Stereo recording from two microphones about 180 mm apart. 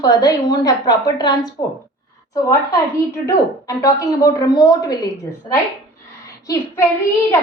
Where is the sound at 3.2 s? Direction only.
15° left (ahead or behind).